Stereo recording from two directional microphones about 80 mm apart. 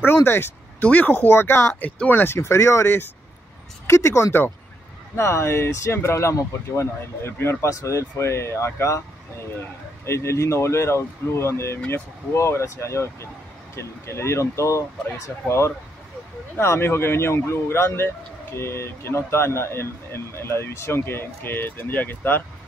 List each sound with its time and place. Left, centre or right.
0.0 s a sound: left
0.8 s speech: centre
1.7 s speech: centre; by 9.0 s left
10.0 s speech: left